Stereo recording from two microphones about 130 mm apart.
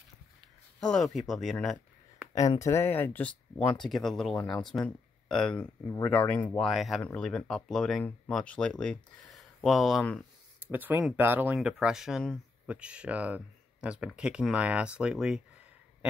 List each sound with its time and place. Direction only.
0.7 s speech: 5° left (ahead or behind)
2.6 s speech: 20° left (ahead or behind)
5.9 s speech: 20° left (ahead or behind)
10.7 s speech: 15° right (ahead or behind)
11.5 s speech: 5° right (ahead or behind)